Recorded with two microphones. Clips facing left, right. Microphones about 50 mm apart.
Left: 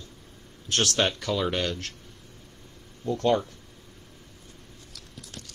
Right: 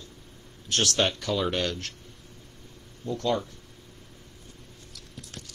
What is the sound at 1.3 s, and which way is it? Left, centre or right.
Speech, centre.